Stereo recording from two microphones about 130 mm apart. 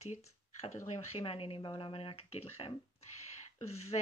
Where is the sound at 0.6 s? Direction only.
60° left (ahead or behind).